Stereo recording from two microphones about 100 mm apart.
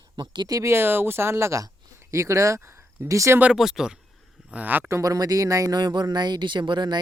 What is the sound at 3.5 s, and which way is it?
Speech, 5° right (ahead or behind).